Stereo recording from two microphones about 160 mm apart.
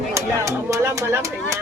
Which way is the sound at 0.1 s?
20° right (ahead or behind).